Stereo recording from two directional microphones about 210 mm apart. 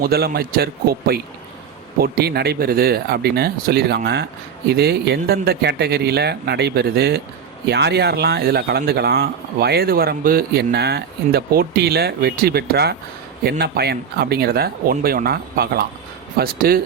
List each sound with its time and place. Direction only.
0.0 s speech: 45° right (ahead or behind)